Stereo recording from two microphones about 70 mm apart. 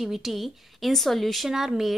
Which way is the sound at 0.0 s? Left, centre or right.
Centre.